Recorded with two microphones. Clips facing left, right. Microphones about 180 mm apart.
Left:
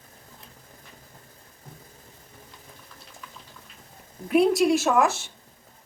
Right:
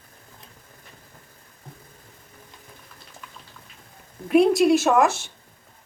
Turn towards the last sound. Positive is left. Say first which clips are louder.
# right 3 dB
turn(degrees=0)  # may be behind; listen again after turning